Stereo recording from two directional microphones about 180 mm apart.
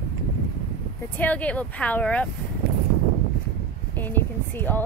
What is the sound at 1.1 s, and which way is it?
Speech, 10° left (ahead or behind).